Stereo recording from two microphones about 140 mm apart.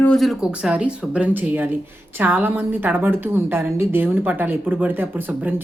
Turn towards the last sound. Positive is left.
turn(degrees=-15)  # may be behind; listen again after turning